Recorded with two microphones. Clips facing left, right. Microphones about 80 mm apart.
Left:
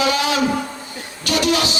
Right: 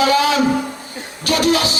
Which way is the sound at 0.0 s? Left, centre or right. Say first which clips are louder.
Right 4 dB; right.